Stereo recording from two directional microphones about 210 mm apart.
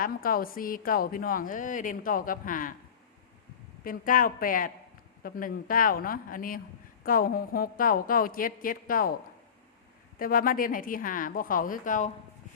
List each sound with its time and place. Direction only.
0.0 s a woman's voice: 45° left (ahead or behind)
3.8 s a woman's voice: 40° left (ahead or behind)
10.2 s a woman's voice: 40° left (ahead or behind)